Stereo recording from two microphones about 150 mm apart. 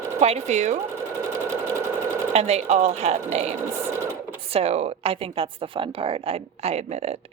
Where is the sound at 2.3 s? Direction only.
45° right (ahead or behind).